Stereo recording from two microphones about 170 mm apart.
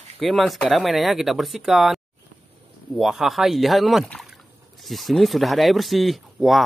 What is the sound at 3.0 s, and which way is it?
Speech, centre (ahead or behind).